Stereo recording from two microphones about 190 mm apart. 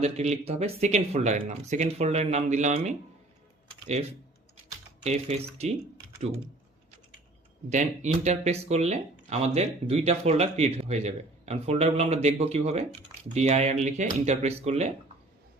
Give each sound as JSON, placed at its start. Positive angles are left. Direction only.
{"t": 0.0, "sound": "speech", "side_deg": -35}
{"t": 3.7, "sound": "typing", "side_deg": -35}
{"t": 5.0, "sound": "speech", "side_deg": -35}
{"t": 7.7, "sound": "speech", "side_deg": -40}